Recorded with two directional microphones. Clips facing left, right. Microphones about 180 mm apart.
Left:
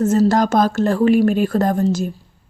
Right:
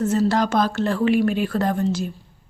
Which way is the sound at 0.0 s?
45° left (ahead or behind).